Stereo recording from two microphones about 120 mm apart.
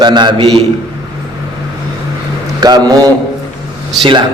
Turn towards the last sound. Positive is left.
turn(degrees=-45)  # may be behind; listen again after turning